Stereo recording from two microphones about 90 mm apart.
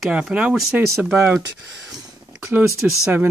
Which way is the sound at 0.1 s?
15° right (ahead or behind).